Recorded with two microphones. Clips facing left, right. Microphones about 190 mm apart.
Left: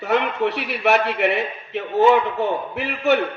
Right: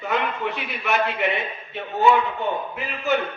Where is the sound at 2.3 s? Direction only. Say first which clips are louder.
Left 4 dB; 75° left (ahead or behind).